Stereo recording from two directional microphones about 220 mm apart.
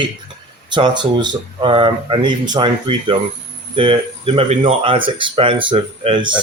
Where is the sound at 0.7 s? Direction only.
20° right (ahead or behind).